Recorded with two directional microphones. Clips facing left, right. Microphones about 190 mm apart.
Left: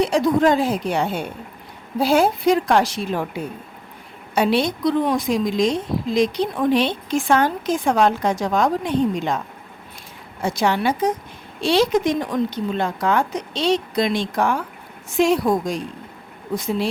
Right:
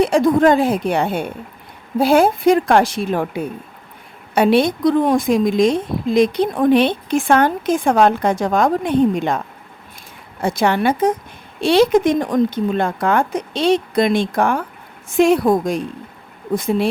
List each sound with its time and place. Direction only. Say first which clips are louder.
0.0 s a woman's voice: right 4 dB; 50° right (ahead or behind)
10.4 s a woman's voice: right 3 dB; 55° right (ahead or behind)